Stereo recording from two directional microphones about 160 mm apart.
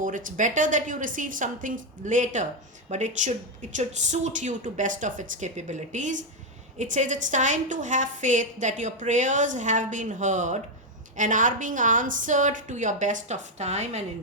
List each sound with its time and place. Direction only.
0.0 s a woman's voice: 55° right (ahead or behind)